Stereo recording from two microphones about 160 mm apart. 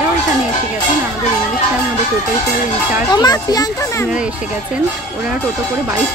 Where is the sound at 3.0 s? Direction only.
25° left (ahead or behind).